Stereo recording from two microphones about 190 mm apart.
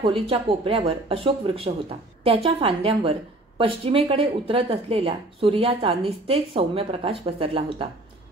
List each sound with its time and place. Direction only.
0.0 s a woman's voice: 30° right (ahead or behind)